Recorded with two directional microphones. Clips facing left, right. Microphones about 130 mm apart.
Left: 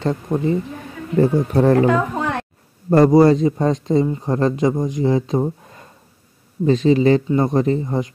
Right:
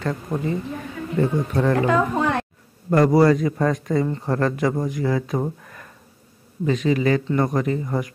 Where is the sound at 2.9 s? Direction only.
25° left (ahead or behind).